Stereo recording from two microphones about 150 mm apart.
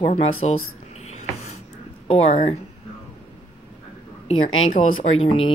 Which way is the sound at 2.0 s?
45° left (ahead or behind).